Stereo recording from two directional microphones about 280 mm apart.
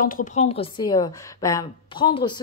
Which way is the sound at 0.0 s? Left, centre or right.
Left.